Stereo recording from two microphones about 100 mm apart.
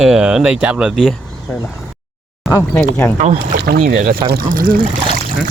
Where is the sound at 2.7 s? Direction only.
20° left (ahead or behind).